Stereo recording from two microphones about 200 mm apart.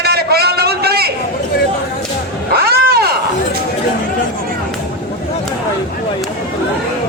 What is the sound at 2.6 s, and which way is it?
Roaring cats, 50° right (ahead or behind).